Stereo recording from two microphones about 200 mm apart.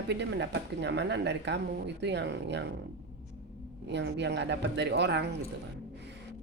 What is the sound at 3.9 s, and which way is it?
Speech, 60° right (ahead or behind).